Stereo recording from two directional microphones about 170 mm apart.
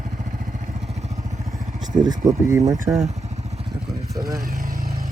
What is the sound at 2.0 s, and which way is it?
Speech, 25° right (ahead or behind).